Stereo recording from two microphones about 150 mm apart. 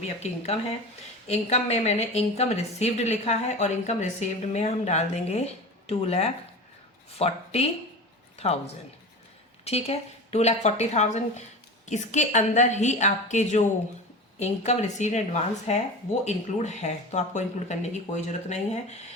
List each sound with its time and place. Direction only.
1.3 s a woman's voice: 45° left (ahead or behind)